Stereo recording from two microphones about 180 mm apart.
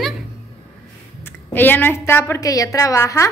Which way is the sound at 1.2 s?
10° left (ahead or behind).